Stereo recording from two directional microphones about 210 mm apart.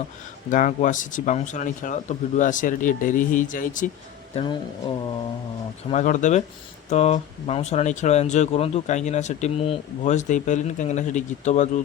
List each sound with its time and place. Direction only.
0.5 s speech: 35° left (ahead or behind)
4.4 s speech: 25° left (ahead or behind)
5.9 s speech: 35° left (ahead or behind)